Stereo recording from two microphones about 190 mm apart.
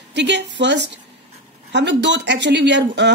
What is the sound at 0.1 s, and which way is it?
A woman's voice, 65° right (ahead or behind).